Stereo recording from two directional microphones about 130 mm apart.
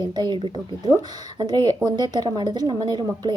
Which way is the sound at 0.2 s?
35° right (ahead or behind).